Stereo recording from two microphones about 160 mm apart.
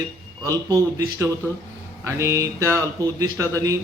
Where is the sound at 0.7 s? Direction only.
20° right (ahead or behind).